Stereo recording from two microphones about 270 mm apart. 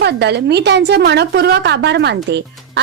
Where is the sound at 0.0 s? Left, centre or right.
Right.